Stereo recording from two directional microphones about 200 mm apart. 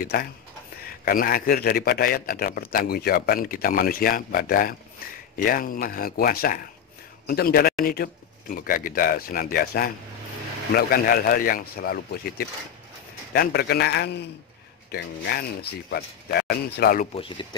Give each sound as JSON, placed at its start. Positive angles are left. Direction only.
{"t": 0.0, "sound": "a man's voice", "side_deg": 45}
{"t": 17.1, "sound": "speech", "side_deg": 25}